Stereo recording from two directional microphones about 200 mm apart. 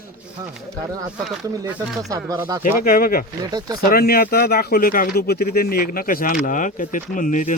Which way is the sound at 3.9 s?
50° left (ahead or behind).